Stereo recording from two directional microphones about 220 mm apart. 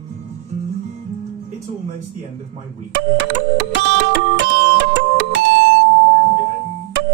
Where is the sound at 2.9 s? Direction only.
55° right (ahead or behind).